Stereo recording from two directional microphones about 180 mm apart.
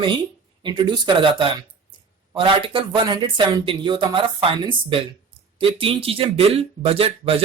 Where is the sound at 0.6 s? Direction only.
25° right (ahead or behind).